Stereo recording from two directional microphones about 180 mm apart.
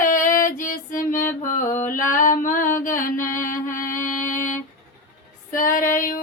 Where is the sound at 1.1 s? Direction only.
15° left (ahead or behind).